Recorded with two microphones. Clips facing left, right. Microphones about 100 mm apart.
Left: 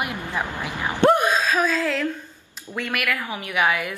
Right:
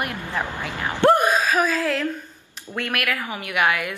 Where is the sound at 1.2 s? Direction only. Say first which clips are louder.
Right 1 dB; 10° right (ahead or behind).